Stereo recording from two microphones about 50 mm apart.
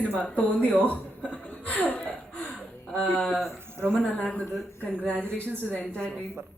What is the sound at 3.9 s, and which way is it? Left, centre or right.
Speech, left.